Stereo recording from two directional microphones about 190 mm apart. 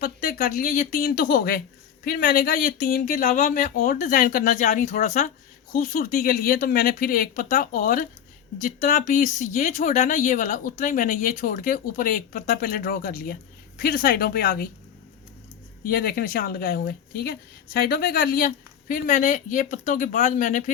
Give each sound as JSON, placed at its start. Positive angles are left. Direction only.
{"t": 0.0, "sound": "speech", "side_deg": 45}
{"t": 15.8, "sound": "speech", "side_deg": 50}